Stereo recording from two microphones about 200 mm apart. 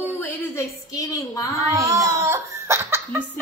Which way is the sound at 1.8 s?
15° right (ahead or behind).